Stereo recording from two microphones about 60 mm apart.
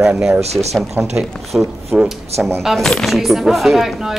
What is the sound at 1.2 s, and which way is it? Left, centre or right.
Speech, right.